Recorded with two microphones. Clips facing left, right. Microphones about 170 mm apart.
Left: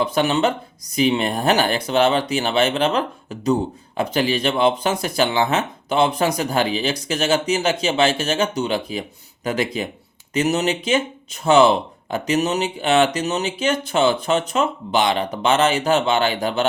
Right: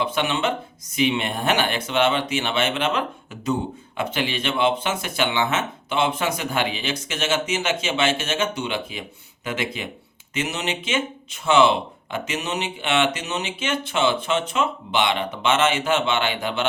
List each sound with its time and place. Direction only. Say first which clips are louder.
0.0 s speech: left 5 dB; 40° left (ahead or behind)